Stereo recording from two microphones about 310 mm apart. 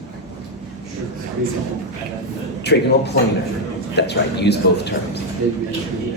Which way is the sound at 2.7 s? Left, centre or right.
Left.